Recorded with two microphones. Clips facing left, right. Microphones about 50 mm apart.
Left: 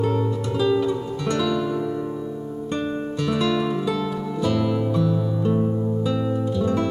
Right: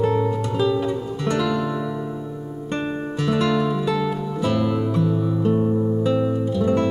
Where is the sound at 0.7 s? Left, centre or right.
Right.